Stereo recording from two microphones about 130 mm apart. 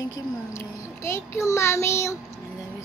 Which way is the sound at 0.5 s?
20° left (ahead or behind).